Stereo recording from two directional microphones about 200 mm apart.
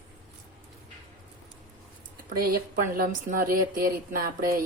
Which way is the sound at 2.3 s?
45° right (ahead or behind).